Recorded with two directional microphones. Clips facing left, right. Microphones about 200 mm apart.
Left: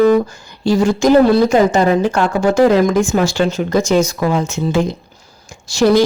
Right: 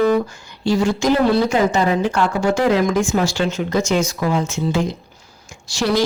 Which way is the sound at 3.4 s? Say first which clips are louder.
Left 4 dB; 35° left (ahead or behind).